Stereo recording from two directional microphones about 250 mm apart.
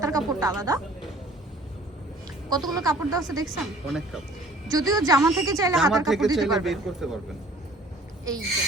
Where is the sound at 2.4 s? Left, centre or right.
Centre.